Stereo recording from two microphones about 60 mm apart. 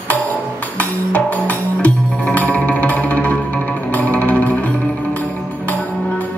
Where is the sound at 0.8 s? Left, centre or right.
Left.